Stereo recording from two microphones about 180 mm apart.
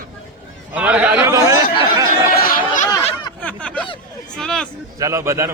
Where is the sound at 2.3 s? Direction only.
55° left (ahead or behind).